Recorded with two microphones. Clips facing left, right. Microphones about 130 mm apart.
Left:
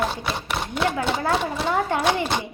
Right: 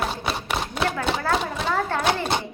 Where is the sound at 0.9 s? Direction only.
20° left (ahead or behind).